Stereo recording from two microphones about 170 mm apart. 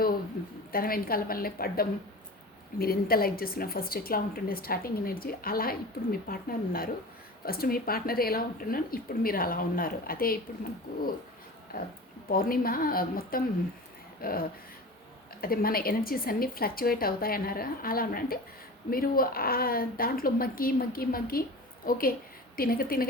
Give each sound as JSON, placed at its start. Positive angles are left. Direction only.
{"t": 0.7, "sound": "a woman's voice", "side_deg": 60}
{"t": 12.3, "sound": "a woman's voice", "side_deg": 60}